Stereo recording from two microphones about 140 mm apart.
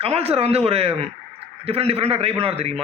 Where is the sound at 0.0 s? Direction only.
45° right (ahead or behind).